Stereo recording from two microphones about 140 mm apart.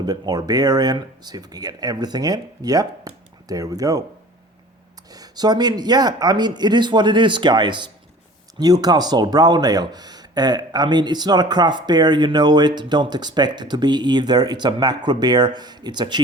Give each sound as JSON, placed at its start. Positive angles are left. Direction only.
{"t": 0.0, "sound": "speech", "side_deg": -25}
{"t": 5.1, "sound": "speech", "side_deg": -30}